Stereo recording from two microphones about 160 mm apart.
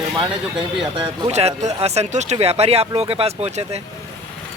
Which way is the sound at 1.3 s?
45° right (ahead or behind).